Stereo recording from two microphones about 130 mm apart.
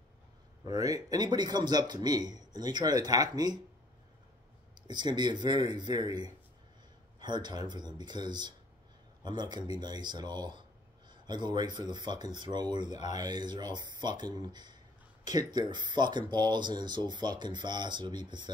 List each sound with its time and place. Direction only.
0.7 s speech: 30° right (ahead or behind)
4.8 s speech: 35° right (ahead or behind)